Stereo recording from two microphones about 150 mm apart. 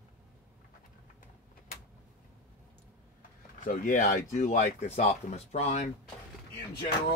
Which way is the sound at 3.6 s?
65° left (ahead or behind).